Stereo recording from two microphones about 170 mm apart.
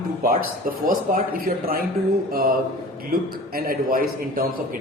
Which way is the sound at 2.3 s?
60° right (ahead or behind).